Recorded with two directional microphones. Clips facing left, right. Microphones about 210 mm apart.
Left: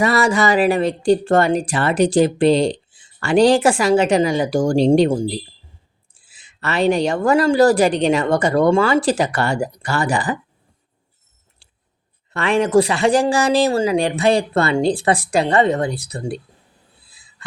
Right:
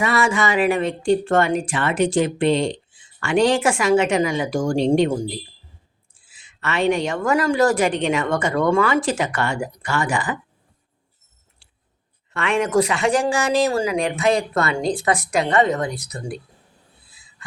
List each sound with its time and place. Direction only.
0.0 s speech: 40° left (ahead or behind)
6.2 s speech: 35° left (ahead or behind)
12.3 s speech: 35° left (ahead or behind)